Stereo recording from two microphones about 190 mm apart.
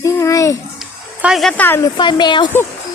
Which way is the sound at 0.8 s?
Centre (ahead or behind).